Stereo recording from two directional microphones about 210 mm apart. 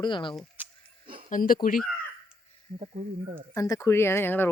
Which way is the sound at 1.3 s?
40° left (ahead or behind).